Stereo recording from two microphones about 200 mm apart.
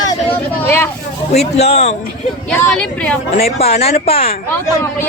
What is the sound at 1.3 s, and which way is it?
Speech, 30° left (ahead or behind).